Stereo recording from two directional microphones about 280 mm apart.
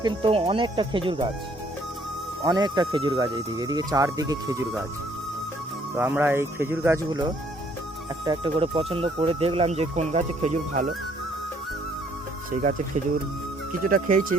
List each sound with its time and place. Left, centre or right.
0.0 s speech: centre
2.4 s speech: centre
6.0 s speech: centre; by 10.8 s right
13.8 s speech: right